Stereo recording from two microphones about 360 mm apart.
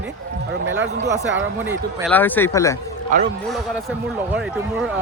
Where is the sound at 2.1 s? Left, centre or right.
Centre.